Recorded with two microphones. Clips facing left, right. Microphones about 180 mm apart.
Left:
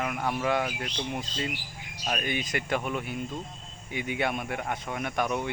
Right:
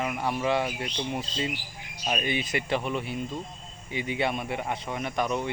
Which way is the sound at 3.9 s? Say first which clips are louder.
Right 1 dB; 55° left (ahead or behind).